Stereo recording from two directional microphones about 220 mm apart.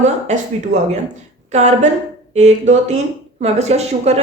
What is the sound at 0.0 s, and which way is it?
A woman's voice, 30° right (ahead or behind).